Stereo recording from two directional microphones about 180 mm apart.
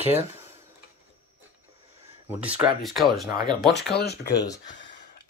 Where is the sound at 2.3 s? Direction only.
10° right (ahead or behind).